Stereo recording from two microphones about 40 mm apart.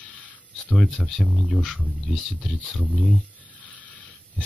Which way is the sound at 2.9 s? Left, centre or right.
Left.